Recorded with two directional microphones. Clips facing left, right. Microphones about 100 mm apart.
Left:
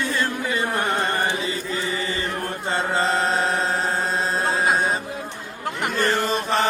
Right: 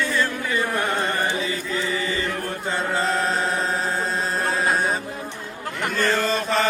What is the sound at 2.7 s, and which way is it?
Chant, 30° left (ahead or behind).